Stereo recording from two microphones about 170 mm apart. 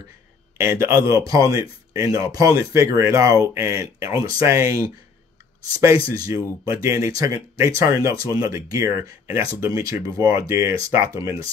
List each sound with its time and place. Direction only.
0.6 s speech: 15° right (ahead or behind)
6.0 s speech: 20° right (ahead or behind)